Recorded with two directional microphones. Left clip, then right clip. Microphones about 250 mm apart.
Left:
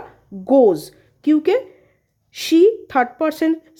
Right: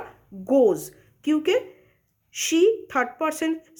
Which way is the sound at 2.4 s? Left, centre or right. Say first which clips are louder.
Left 6 dB; left.